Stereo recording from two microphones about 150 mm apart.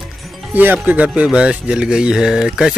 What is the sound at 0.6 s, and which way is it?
Speech, 10° right (ahead or behind).